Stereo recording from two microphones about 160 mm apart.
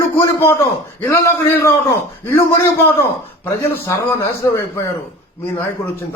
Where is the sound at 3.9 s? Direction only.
15° left (ahead or behind).